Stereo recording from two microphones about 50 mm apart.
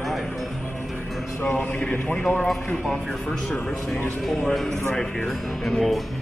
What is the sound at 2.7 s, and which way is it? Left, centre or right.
Speech, left.